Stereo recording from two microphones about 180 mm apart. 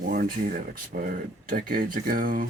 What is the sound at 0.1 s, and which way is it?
Speech, 55° right (ahead or behind).